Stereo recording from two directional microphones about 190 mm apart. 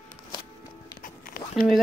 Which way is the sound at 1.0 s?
50° left (ahead or behind).